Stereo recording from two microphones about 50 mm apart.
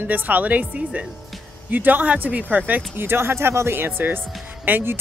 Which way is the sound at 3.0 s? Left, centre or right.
Right.